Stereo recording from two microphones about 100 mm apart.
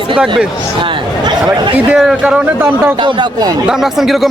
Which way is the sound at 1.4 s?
5° right (ahead or behind).